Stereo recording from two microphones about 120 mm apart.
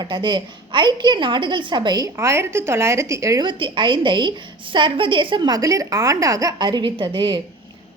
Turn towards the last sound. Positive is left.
turn(degrees=-40)  # may be behind; listen again after turning